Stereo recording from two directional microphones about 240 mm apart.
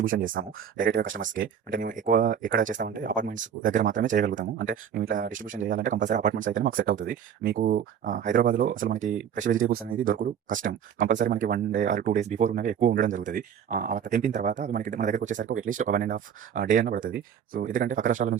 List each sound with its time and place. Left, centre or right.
0.0 s speech: right